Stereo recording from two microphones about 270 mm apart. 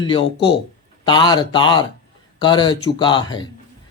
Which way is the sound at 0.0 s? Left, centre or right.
Centre.